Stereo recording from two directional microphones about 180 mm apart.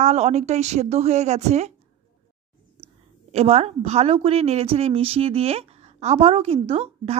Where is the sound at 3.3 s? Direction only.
35° right (ahead or behind).